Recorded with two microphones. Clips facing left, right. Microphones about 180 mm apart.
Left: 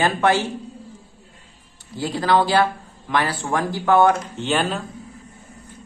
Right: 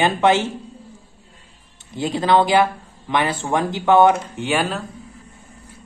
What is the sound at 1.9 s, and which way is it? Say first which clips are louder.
Speech: right 2 dB; 20° right (ahead or behind).